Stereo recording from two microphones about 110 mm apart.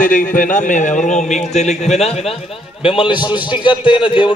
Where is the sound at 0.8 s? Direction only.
90° left; by 2.3 s 70° left (ahead or behind).